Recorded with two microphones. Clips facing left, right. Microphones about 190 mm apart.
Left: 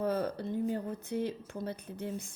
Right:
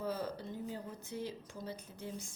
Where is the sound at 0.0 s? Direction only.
60° left (ahead or behind).